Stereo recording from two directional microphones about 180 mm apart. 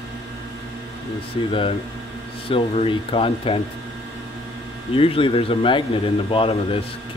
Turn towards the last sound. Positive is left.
turn(degrees=30)  # may be behind; listen again after turning